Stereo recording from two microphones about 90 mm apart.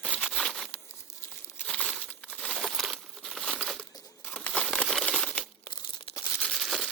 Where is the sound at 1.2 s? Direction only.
15° left (ahead or behind).